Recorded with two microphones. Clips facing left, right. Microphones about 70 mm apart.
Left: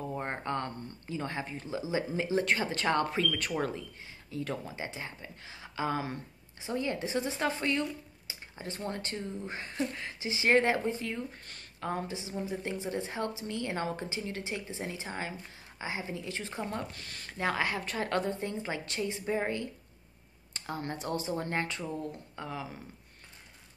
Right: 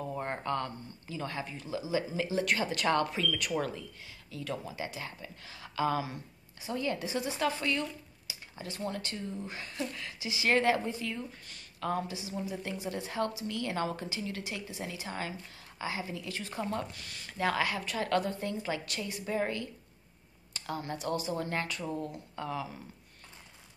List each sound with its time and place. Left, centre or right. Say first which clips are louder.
0.2 s a sound: right 2 dB; left
1.0 s a woman's voice: left 1 dB; left
16.9 s speech: left 1 dB; left
17.3 s a woman's voice: right 1 dB; left
20.5 s a sound: right 1 dB; left
20.9 s a woman's voice: right 1 dB; left; by 22.7 s centre